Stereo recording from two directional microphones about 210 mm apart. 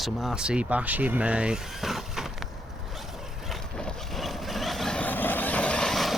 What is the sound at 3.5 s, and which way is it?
Vehicle, centre (ahead or behind).